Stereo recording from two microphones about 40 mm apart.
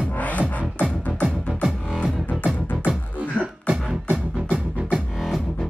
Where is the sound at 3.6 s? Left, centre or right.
Right.